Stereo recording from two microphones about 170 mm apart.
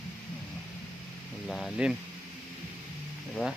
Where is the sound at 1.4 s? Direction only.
Centre (ahead or behind).